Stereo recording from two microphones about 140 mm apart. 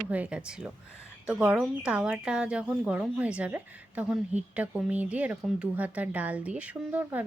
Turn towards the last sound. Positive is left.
turn(degrees=-10)  # may be behind; listen again after turning